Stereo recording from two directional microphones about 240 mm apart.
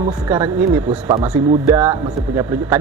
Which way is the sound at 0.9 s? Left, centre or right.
Right.